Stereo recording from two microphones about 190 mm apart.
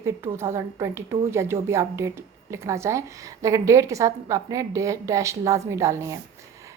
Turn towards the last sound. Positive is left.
turn(degrees=-15)  # may be behind; listen again after turning